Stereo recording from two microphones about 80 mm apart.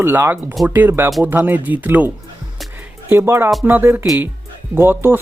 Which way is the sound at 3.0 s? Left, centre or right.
Right.